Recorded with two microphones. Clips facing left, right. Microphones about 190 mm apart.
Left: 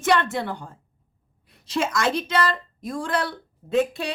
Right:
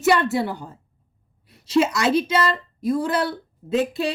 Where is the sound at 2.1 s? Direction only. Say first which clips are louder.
Right 3 dB; 5° right (ahead or behind).